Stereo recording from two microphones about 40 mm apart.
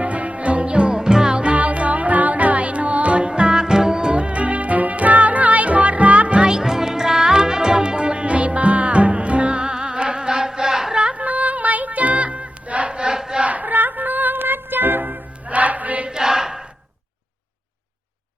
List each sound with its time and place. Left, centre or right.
0.0 s music: right
1.5 s music: right
3.2 s music: right
6.5 s music: centre
10.9 s a sound: right
11.3 s music: right
12.9 s battle cry: right
13.4 s music: right
15.4 s music: right
16.0 s a sound: centre